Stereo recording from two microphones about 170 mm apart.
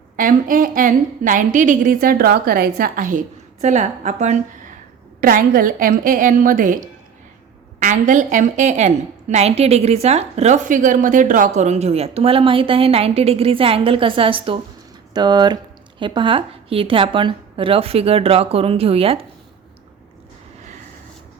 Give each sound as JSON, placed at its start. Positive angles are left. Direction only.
{"t": 0.2, "sound": "a woman's voice", "side_deg": -55}